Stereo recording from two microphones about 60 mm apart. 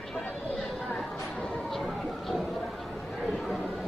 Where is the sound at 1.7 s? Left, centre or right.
Centre.